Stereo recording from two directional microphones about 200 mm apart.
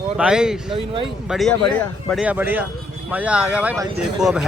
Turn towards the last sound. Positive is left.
turn(degrees=-5)  # may be behind; listen again after turning